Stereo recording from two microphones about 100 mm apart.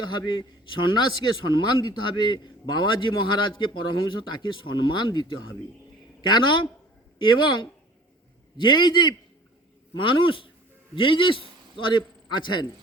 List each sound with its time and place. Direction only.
0.2 s a man's voice: 45° left (ahead or behind)